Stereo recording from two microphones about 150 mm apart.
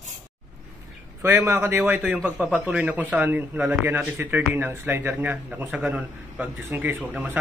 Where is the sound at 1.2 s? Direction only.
15° right (ahead or behind).